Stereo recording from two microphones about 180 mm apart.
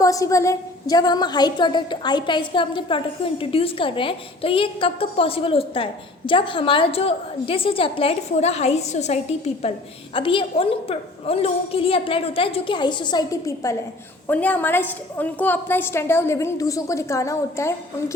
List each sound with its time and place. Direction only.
0.0 s a woman's voice: 20° left (ahead or behind)